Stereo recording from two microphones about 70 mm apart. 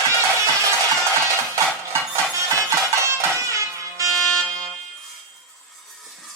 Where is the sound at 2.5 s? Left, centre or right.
Right.